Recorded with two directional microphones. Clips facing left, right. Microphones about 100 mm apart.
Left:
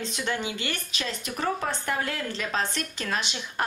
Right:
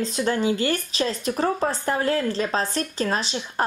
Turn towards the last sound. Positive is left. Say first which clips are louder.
# right 5 dB
turn(degrees=-35)  # may be behind; listen again after turning